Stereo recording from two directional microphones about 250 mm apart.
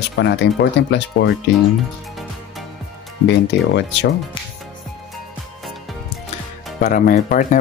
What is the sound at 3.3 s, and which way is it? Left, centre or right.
Speech, left.